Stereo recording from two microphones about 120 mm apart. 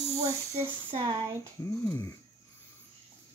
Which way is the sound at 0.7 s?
40° right (ahead or behind).